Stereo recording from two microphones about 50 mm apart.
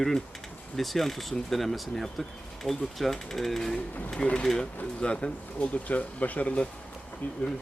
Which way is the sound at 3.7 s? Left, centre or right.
Left.